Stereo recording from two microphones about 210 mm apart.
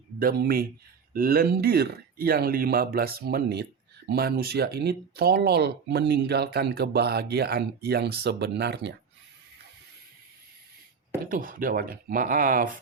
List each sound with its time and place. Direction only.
0.2 s speech: 45° right (ahead or behind)
11.3 s speech: 40° right (ahead or behind)